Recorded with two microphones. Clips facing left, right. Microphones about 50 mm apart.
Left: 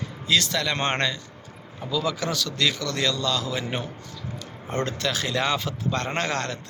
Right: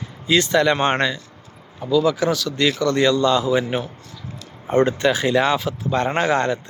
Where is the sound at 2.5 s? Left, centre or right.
Right.